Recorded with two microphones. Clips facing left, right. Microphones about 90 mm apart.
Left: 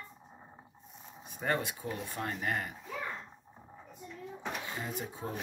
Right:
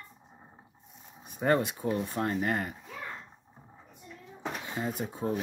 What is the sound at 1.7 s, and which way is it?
Speech, 35° right (ahead or behind).